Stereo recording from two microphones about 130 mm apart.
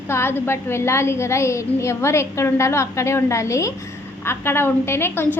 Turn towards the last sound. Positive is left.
turn(degrees=20)  # may be behind; listen again after turning